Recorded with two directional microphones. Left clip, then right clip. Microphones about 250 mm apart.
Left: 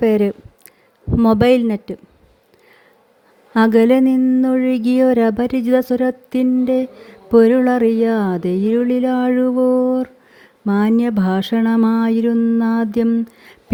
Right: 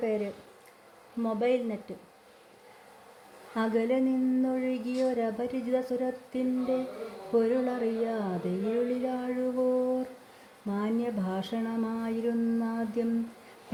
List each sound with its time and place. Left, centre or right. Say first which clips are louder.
0.0 s speech: left 15 dB; left
3.5 s speech: left 15 dB; left
10.7 s speech: left 14 dB; left